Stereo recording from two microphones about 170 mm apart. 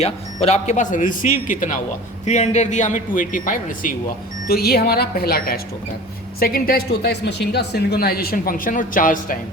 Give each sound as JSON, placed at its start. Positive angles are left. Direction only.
{"t": 0.0, "sound": "speech", "side_deg": 40}
{"t": 4.4, "sound": "speech", "side_deg": 65}